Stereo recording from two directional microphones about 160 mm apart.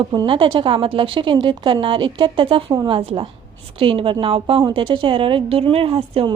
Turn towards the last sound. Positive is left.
turn(degrees=-35)  # may be behind; listen again after turning